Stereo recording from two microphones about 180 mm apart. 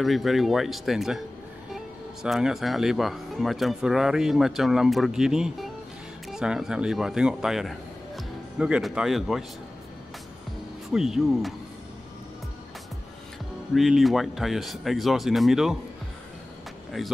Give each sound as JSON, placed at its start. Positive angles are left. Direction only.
{"t": 0.0, "sound": "speech", "side_deg": 0}
{"t": 2.2, "sound": "speech", "side_deg": 0}
{"t": 10.9, "sound": "speech", "side_deg": 0}
{"t": 13.7, "sound": "speech", "side_deg": 0}